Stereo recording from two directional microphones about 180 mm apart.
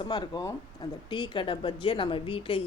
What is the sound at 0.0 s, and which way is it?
Speech, 25° left (ahead or behind).